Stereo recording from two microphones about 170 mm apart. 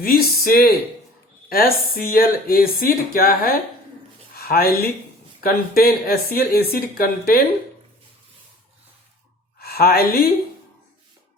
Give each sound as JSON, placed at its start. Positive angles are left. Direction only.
{"t": 0.0, "sound": "speech", "side_deg": 60}
{"t": 9.6, "sound": "a woman's voice", "side_deg": 65}